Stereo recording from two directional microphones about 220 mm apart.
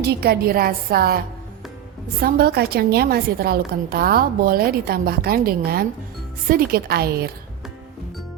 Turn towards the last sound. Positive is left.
turn(degrees=-45)  # may be behind; listen again after turning